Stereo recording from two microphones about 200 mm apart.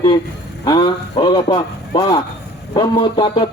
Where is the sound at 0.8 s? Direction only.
25° left (ahead or behind).